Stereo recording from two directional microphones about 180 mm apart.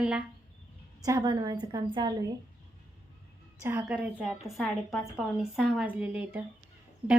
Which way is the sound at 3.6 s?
10° right (ahead or behind).